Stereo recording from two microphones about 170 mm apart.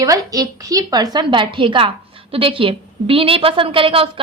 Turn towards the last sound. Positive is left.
turn(degrees=-30)  # may be behind; listen again after turning